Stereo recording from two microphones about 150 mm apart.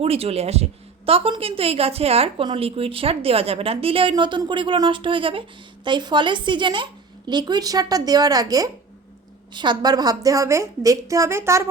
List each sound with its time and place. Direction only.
0.0 s a woman's voice: 40° right (ahead or behind); by 11.6 s 15° right (ahead or behind)